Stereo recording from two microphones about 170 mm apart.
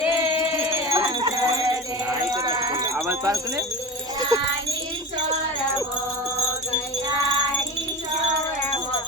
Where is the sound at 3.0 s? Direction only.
15° right (ahead or behind).